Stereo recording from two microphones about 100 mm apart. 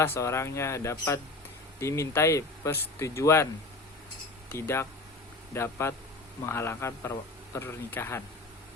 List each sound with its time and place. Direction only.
0.0 s a man's voice: 25° left (ahead or behind)
4.5 s a man's voice: 25° left (ahead or behind)